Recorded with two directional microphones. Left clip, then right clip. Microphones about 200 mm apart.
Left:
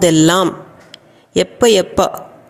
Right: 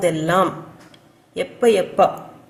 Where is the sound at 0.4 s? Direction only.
45° left (ahead or behind).